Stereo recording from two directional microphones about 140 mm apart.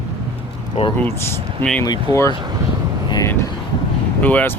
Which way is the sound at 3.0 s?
30° left (ahead or behind).